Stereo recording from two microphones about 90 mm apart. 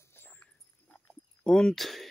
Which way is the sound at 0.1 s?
25° left (ahead or behind).